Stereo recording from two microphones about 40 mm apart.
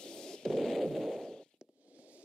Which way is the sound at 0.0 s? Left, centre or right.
Centre.